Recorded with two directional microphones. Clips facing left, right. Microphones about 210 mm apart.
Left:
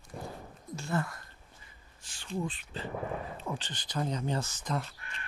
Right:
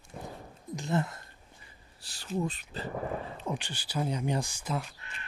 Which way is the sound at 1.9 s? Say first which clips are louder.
Right 3 dB; 35° right (ahead or behind).